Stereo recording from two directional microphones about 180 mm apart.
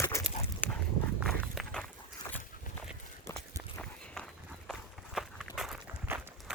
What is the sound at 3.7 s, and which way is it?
Walk, 5° left (ahead or behind).